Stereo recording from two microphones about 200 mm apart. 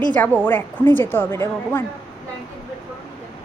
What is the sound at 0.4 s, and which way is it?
A woman's voice, 10° left (ahead or behind).